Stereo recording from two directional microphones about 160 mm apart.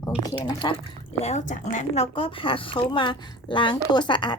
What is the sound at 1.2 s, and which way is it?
Speech, 45° left (ahead or behind).